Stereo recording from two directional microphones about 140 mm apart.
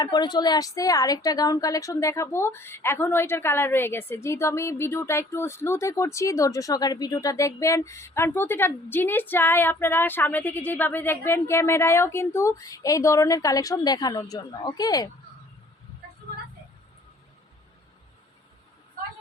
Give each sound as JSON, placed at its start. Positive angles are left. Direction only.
{"t": 0.0, "sound": "a woman's voice", "side_deg": 30}